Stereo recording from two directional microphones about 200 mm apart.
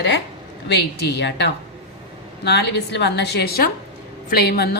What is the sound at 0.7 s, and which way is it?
A woman's voice, 60° left (ahead or behind).